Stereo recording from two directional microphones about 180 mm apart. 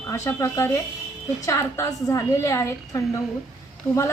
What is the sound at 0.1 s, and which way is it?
A woman's voice, 15° left (ahead or behind).